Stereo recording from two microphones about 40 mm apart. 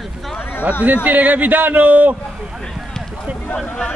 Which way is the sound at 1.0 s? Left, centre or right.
Right.